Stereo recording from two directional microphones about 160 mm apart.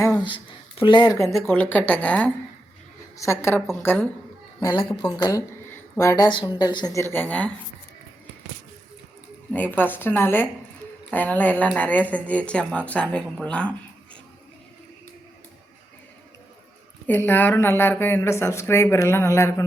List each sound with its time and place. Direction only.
0.0 s speech: 25° left (ahead or behind)
4.6 s a woman's voice: 30° left (ahead or behind)
5.7 s a sound: 20° left (ahead or behind)
6.2 s a woman's voice: 30° left (ahead or behind); by 7.5 s 10° left (ahead or behind)
9.7 s speech: 10° left (ahead or behind)
17.1 s speech: 10° left (ahead or behind)